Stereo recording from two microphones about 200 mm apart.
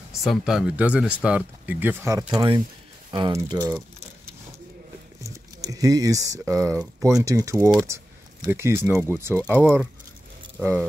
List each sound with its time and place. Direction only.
0.1 s speech: centre (ahead or behind); by 3.7 s 20° right (ahead or behind)
5.2 s speech: 15° right (ahead or behind)